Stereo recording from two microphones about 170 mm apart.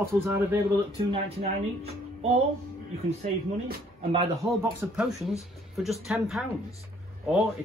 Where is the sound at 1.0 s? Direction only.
35° right (ahead or behind).